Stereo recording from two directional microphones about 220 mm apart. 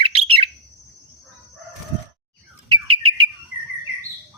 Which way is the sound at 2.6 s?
20° right (ahead or behind).